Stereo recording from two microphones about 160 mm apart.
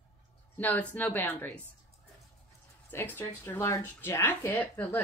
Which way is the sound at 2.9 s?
15° left (ahead or behind).